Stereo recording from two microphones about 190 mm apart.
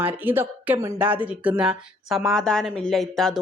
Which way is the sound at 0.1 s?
10° right (ahead or behind).